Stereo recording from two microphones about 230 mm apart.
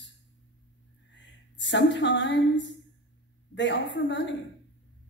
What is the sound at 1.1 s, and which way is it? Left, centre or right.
A woman's voice, left.